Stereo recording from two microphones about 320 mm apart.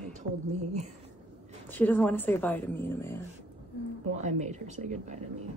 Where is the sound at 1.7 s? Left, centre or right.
Centre.